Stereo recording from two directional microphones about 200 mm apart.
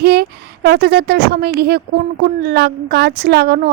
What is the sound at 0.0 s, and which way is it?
A woman's voice, 55° right (ahead or behind).